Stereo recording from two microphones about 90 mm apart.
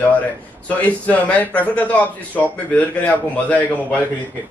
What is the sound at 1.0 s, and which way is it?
Speech, 15° left (ahead or behind).